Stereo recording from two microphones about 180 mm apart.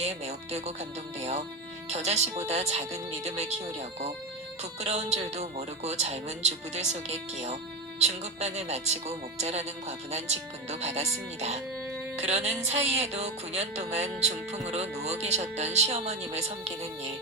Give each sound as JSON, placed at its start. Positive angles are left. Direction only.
{"t": 0.0, "sound": "speech", "side_deg": -35}
{"t": 4.8, "sound": "speech", "side_deg": -35}